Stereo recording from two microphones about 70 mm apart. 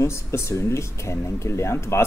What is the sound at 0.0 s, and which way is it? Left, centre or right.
Speech, left.